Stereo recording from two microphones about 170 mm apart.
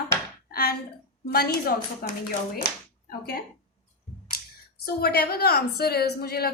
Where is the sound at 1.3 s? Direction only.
60° left (ahead or behind).